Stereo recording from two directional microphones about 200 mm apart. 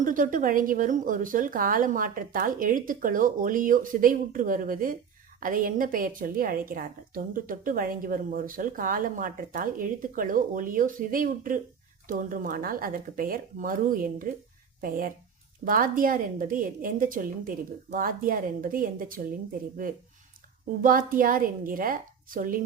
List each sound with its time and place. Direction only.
0.0 s a woman's voice: 40° right (ahead or behind)
20.8 s a woman's voice: 45° right (ahead or behind)